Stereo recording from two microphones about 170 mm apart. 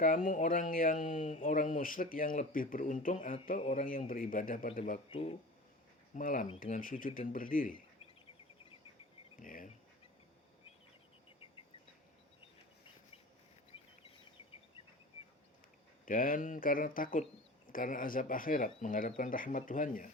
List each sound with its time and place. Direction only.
0.0 s speech: 50° left (ahead or behind)
5.1 s speech: 35° left (ahead or behind)
6.1 s speech: 50° left (ahead or behind)
9.4 s speech: 50° left (ahead or behind)
16.0 s speech: 55° left (ahead or behind)